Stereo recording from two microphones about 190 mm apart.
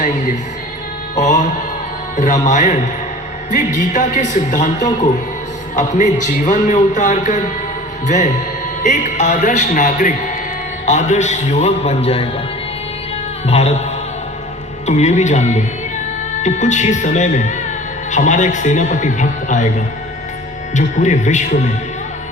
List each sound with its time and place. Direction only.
1.1 s a man's voice: 40° left (ahead or behind)
13.5 s a man's voice: 35° left (ahead or behind)
14.8 s a man's voice: 35° left (ahead or behind)
20.7 s a man's voice: 40° left (ahead or behind)